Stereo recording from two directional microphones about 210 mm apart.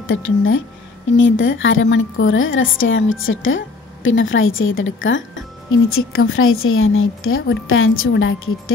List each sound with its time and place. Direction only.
0.0 s a woman's voice: 70° left (ahead or behind)
5.7 s a woman's voice: 80° left